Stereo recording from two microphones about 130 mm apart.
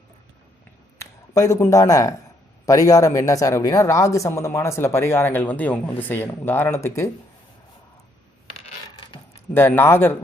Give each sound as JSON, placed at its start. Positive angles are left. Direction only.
{"t": 0.9, "sound": "speech", "side_deg": 25}
{"t": 9.6, "sound": "speech", "side_deg": 15}